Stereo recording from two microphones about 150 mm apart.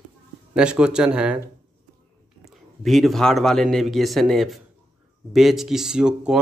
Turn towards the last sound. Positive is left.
turn(degrees=-5)  # may be behind; listen again after turning